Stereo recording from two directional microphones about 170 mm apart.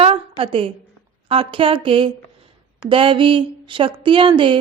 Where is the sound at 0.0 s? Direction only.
35° right (ahead or behind).